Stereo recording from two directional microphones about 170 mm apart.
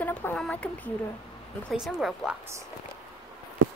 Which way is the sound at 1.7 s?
Centre (ahead or behind).